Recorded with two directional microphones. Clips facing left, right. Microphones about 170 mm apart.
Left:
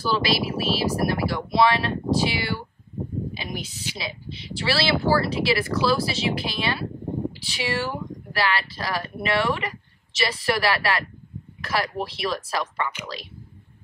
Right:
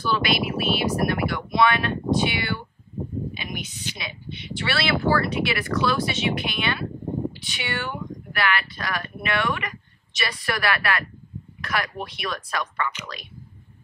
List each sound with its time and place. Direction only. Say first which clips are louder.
0.0 s speech: even; 30° left (ahead or behind)